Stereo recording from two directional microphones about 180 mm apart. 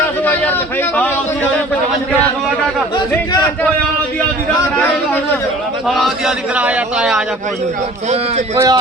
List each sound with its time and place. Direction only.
5.9 s a man's voice: centre (ahead or behind)
8.5 s a man's voice: 20° right (ahead or behind)